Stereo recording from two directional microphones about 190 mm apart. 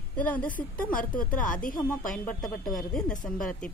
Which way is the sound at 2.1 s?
5° left (ahead or behind).